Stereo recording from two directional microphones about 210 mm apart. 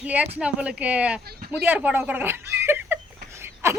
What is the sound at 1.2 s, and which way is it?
Speech, 45° right (ahead or behind).